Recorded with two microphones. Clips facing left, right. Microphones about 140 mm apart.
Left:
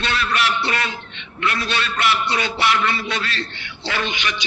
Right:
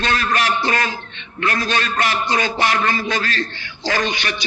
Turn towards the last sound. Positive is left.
turn(degrees=-35)  # may be behind; listen again after turning